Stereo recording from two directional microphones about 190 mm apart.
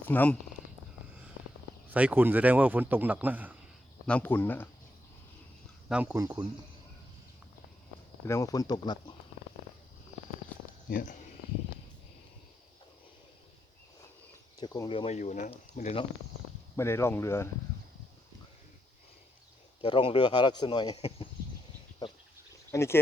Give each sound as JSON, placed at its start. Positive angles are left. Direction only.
{"t": 0.1, "sound": "speech", "side_deg": 10}
{"t": 1.9, "sound": "speech", "side_deg": -5}
{"t": 4.0, "sound": "speech", "side_deg": 10}
{"t": 5.9, "sound": "speech", "side_deg": -10}
{"t": 6.2, "sound": "speech", "side_deg": -20}
{"t": 8.3, "sound": "speech", "side_deg": 15}
{"t": 10.8, "sound": "speech", "side_deg": 45}
{"t": 14.6, "sound": "speech", "side_deg": 20}
{"t": 14.8, "sound": "speech", "side_deg": 30}
{"t": 16.7, "sound": "speech", "side_deg": 15}
{"t": 19.8, "sound": "speech", "side_deg": 25}
{"t": 22.7, "sound": "speech", "side_deg": 15}